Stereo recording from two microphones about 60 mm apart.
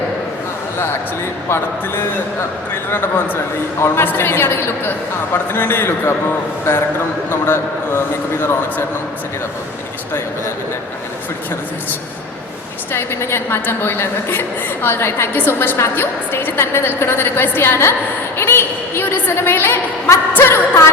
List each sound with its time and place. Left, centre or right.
1.5 s a woman's voice: left
7.3 s a woman's voice: left
12.9 s a woman's voice: left
18.3 s a sound: left
19.4 s a woman's voice: left
20.3 s music: left